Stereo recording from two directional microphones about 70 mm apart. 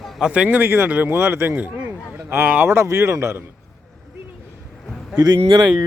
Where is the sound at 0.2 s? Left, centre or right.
Centre; by 3.4 s right.